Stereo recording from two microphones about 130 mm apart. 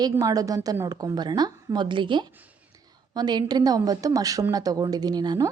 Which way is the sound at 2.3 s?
10° right (ahead or behind).